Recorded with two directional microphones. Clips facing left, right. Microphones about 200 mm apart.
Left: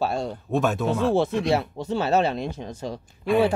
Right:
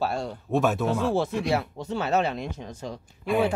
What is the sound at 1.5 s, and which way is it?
Speech, 25° left (ahead or behind).